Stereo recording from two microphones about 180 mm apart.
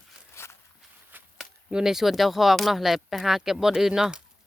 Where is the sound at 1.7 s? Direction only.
5° right (ahead or behind).